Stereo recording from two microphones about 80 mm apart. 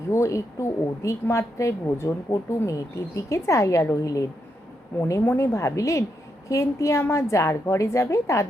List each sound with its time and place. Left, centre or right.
0.1 s a woman's voice: left
5.4 s a woman's voice: left